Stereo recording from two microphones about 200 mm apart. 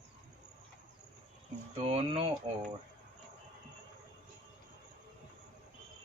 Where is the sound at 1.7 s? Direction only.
30° right (ahead or behind).